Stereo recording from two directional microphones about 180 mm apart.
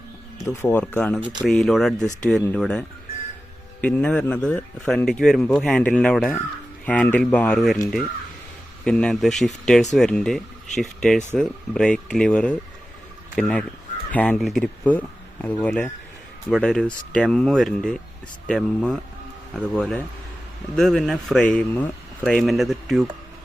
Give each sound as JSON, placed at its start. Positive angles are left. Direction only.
{"t": 0.3, "sound": "speech", "side_deg": 15}
{"t": 1.2, "sound": "speech", "side_deg": -25}
{"t": 1.5, "sound": "a man's voice", "side_deg": 0}
{"t": 8.8, "sound": "a man's voice", "side_deg": 5}